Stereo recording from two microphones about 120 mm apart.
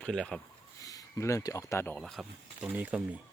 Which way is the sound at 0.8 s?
30° left (ahead or behind).